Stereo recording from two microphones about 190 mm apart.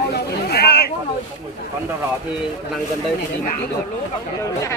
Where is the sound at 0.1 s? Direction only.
55° left (ahead or behind).